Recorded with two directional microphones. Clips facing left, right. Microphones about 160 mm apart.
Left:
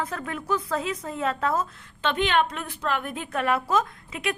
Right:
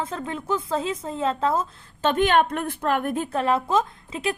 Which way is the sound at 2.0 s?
45° right (ahead or behind).